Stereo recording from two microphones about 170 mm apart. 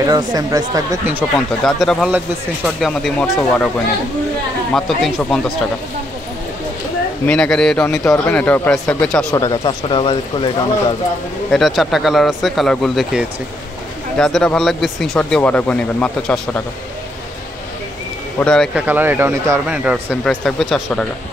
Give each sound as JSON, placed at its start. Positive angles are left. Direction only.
{"t": 0.0, "sound": "speech", "side_deg": -20}
{"t": 1.3, "sound": "speech", "side_deg": 0}
{"t": 4.7, "sound": "speech", "side_deg": 0}
{"t": 7.2, "sound": "speech", "side_deg": 5}
{"t": 9.3, "sound": "speech", "side_deg": 25}
{"t": 11.5, "sound": "speech", "side_deg": 0}
{"t": 18.4, "sound": "speech", "side_deg": 5}
{"t": 18.8, "sound": "speech", "side_deg": -10}